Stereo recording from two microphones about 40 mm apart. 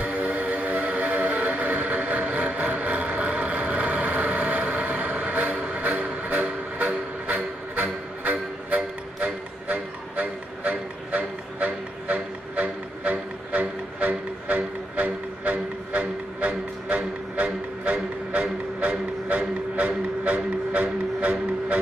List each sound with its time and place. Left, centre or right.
0.0 s music: right